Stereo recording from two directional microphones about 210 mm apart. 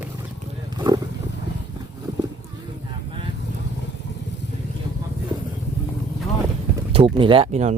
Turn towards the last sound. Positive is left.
turn(degrees=-30)  # may be behind; listen again after turning